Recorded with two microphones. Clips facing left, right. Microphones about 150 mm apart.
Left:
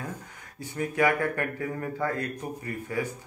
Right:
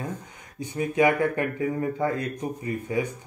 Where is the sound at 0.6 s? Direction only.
20° right (ahead or behind).